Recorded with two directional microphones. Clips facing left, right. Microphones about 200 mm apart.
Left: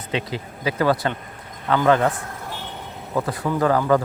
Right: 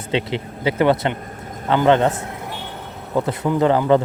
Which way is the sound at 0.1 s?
25° right (ahead or behind).